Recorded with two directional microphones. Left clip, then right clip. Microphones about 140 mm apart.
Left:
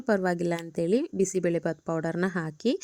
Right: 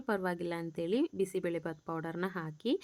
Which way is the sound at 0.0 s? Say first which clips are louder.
Left 8 dB; 35° left (ahead or behind).